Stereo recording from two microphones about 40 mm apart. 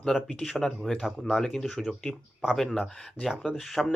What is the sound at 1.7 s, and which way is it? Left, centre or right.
Speech, centre.